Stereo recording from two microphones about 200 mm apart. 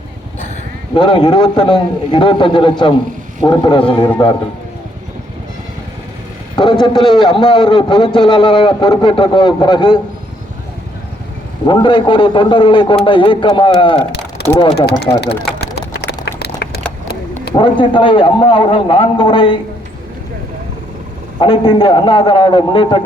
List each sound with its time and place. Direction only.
0.9 s a man's voice: 25° left (ahead or behind)
6.6 s a man's voice: 20° left (ahead or behind)
11.7 s a man's voice: 25° left (ahead or behind)
15.6 s vehicle: 55° left (ahead or behind)
16.2 s a sound: 55° left (ahead or behind)
17.5 s a man's voice: 25° left (ahead or behind)
21.3 s a man's voice: 25° left (ahead or behind)